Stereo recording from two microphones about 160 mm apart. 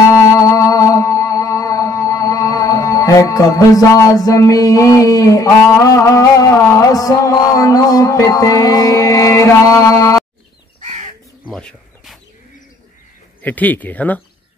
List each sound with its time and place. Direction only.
0.1 s music: 20° left (ahead or behind)
11.4 s bird: 5° left (ahead or behind)
13.4 s speech: 10° left (ahead or behind)